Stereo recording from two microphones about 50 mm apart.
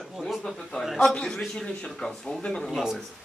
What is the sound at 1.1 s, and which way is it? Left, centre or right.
Speech, centre.